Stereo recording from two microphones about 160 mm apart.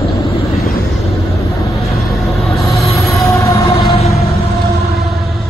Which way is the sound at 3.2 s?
20° left (ahead or behind).